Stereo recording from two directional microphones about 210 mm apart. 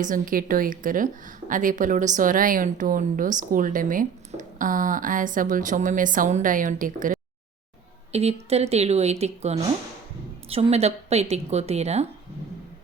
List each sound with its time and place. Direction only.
0.0 s a woman's voice: 40° right (ahead or behind)